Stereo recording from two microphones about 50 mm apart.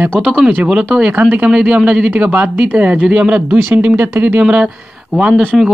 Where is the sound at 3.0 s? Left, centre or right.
Right.